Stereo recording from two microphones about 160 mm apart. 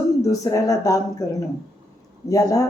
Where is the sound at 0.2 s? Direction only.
20° left (ahead or behind).